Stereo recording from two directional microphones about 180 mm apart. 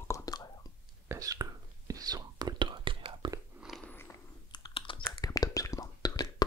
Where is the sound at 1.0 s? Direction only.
15° right (ahead or behind).